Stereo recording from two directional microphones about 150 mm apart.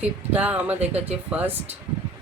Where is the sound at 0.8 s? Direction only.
45° right (ahead or behind).